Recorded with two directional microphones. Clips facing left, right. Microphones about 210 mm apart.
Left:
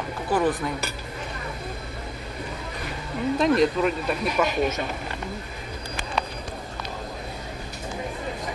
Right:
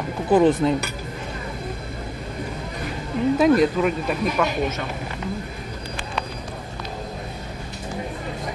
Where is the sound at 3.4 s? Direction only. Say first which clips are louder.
Right 3 dB; 5° right (ahead or behind).